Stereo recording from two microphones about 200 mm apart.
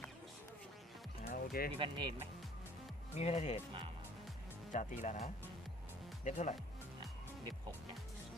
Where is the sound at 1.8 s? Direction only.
25° right (ahead or behind).